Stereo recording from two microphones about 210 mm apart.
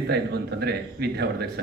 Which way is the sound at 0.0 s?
50° right (ahead or behind).